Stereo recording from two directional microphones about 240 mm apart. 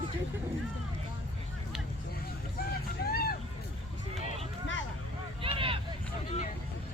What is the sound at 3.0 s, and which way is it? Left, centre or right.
Vehicle, left.